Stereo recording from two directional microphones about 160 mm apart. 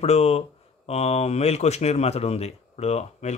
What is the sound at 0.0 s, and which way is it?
Speech, 40° left (ahead or behind).